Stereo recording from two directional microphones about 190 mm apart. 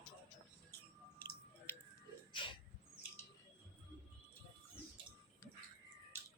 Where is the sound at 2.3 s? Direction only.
25° left (ahead or behind).